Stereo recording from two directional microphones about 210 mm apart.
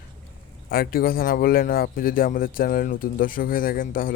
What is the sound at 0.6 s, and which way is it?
A man's voice, 45° left (ahead or behind).